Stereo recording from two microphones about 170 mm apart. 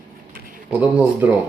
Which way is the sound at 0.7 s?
10° right (ahead or behind).